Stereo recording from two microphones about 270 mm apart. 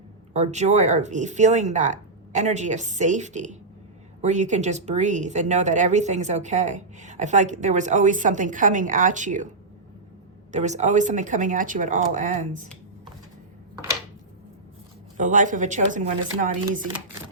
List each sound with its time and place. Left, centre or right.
0.3 s speech: right
10.5 s speech: right
15.2 s speech: right